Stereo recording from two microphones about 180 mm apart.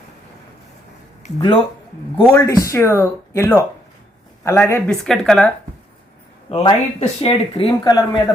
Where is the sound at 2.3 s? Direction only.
15° left (ahead or behind).